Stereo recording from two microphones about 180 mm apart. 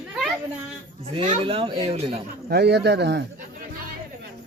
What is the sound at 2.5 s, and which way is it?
Speech, 65° right (ahead or behind).